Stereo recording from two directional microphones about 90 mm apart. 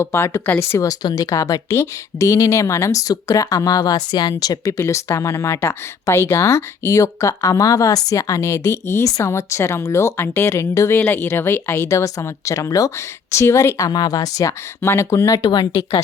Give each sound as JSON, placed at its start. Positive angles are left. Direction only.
{"t": 0.0, "sound": "speech", "side_deg": 30}
{"t": 4.8, "sound": "speech", "side_deg": 35}
{"t": 14.8, "sound": "speech", "side_deg": 30}
{"t": 15.4, "sound": "speech", "side_deg": 50}